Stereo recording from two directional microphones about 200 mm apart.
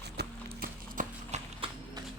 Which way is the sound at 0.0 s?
50° right (ahead or behind).